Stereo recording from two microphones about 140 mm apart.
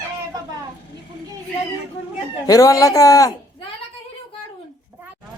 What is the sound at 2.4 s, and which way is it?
Speech, 25° left (ahead or behind).